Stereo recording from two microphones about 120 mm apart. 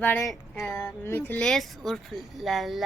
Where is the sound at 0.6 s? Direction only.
20° left (ahead or behind).